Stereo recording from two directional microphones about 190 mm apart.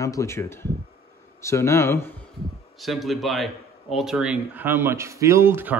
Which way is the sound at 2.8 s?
Centre (ahead or behind).